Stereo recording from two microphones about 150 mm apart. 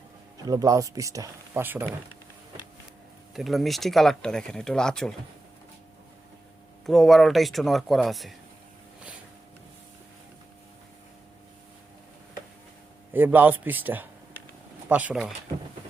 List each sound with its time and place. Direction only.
0.4 s speech: 25° right (ahead or behind)
3.3 s speech: centre (ahead or behind)
6.8 s speech: centre (ahead or behind)
13.1 s a man's voice: 10° right (ahead or behind)